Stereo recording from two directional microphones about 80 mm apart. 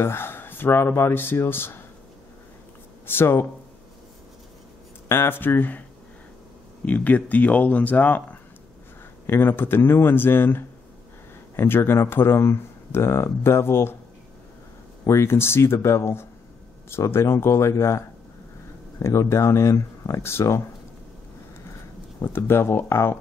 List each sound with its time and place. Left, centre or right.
0.0 s speech: left
3.1 s speech: left
5.0 s speech: left
15.0 s speech: left
22.2 s speech: left